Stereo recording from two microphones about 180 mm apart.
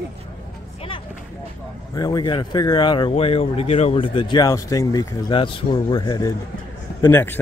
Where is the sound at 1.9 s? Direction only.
20° left (ahead or behind).